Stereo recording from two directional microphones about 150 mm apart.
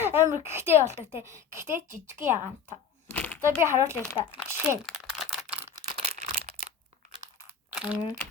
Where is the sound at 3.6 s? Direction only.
20° right (ahead or behind).